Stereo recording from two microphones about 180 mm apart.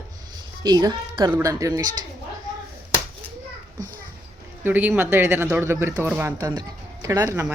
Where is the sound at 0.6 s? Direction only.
20° right (ahead or behind).